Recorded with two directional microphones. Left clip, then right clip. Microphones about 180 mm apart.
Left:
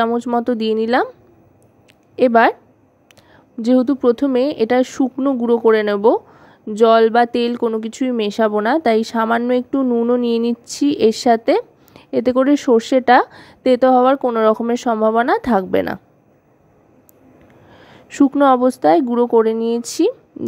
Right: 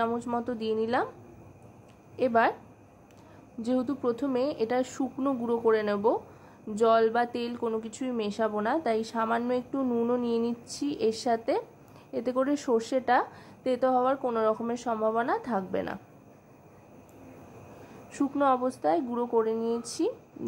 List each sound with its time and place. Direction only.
0.0 s speech: 45° left (ahead or behind)
2.1 s speech: 45° left (ahead or behind)
3.6 s speech: 45° left (ahead or behind)
18.1 s speech: 45° left (ahead or behind)